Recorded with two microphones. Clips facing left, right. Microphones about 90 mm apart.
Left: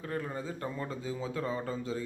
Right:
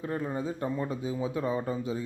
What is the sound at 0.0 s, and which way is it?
A man's voice, 20° right (ahead or behind).